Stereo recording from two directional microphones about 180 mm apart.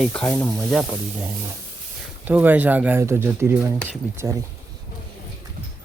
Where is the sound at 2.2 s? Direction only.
10° right (ahead or behind).